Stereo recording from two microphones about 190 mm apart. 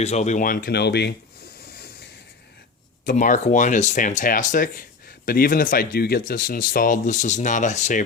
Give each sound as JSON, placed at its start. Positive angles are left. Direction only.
{"t": 0.0, "sound": "speech", "side_deg": 35}
{"t": 3.1, "sound": "speech", "side_deg": 40}